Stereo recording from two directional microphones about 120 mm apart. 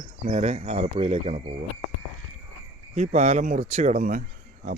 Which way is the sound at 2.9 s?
65° right (ahead or behind).